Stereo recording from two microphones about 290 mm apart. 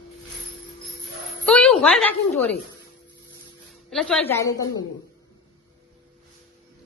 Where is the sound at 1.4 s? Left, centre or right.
Centre.